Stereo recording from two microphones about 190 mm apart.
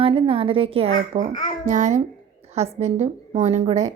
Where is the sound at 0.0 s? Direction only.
30° right (ahead or behind).